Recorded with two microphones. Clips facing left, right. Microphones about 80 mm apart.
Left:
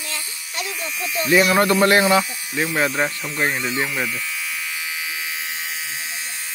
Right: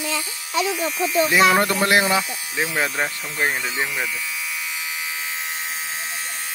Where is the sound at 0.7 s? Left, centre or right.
Right.